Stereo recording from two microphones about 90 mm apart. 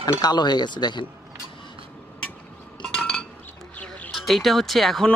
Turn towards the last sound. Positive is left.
turn(degrees=5)  # may be behind; listen again after turning